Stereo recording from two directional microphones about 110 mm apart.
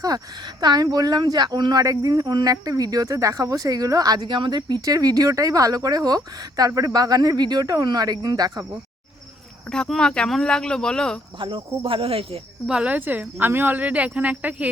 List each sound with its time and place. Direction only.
0.0 s speech: 40° right (ahead or behind)
9.6 s speech: 5° left (ahead or behind)
11.3 s speech: 50° right (ahead or behind)
12.6 s speech: 10° right (ahead or behind)